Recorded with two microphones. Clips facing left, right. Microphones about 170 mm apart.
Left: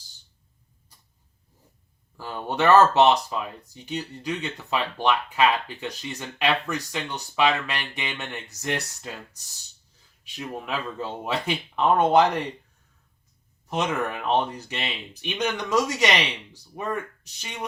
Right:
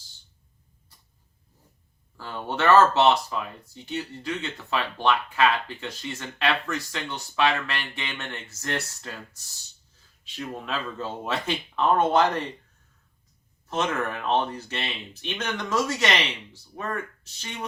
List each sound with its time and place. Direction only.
2.1 s speech: 15° left (ahead or behind)
13.7 s speech: 15° left (ahead or behind)